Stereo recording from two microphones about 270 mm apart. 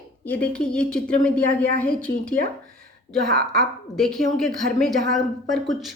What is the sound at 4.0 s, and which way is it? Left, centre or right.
A woman's voice, centre.